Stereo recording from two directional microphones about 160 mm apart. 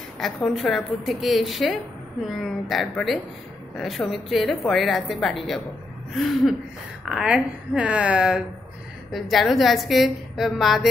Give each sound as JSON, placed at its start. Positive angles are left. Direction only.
{"t": 0.2, "sound": "a woman's voice", "side_deg": 0}